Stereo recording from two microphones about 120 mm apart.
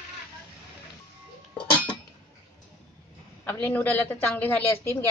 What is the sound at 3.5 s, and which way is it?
A woman's voice, 15° left (ahead or behind).